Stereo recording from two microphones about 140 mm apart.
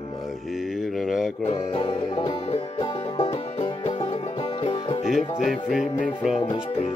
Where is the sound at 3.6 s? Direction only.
35° left (ahead or behind).